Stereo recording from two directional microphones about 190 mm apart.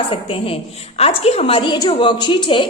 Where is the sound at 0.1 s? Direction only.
30° left (ahead or behind).